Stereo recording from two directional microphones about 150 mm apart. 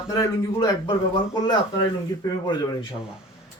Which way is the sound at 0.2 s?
25° left (ahead or behind).